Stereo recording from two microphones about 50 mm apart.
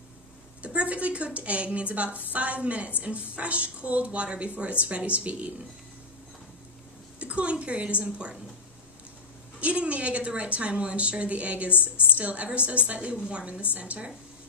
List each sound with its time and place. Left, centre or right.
0.6 s a woman's voice: right
7.2 s a woman's voice: right
9.6 s a woman's voice: right
11.7 s a woman's voice: left
12.2 s a woman's voice: right